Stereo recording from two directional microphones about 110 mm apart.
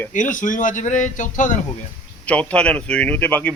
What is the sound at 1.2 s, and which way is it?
Speech, 90° left.